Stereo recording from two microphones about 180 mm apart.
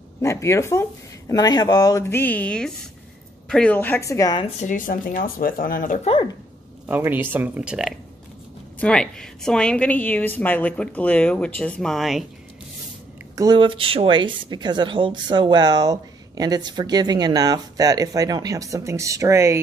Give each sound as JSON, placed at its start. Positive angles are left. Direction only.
{"t": 0.2, "sound": "a woman's voice", "side_deg": 15}
{"t": 4.6, "sound": "speech", "side_deg": 45}
{"t": 6.9, "sound": "speech", "side_deg": -10}
{"t": 8.7, "sound": "a woman's voice", "side_deg": 5}
{"t": 13.4, "sound": "speech", "side_deg": -25}